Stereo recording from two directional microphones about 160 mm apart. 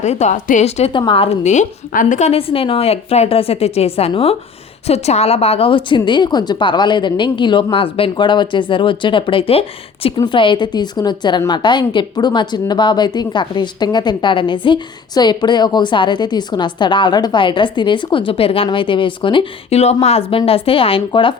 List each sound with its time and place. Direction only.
0.0 s a woman's voice: 45° left (ahead or behind)